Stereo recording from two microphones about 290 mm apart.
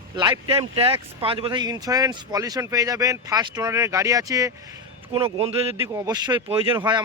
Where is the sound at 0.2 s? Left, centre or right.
Centre.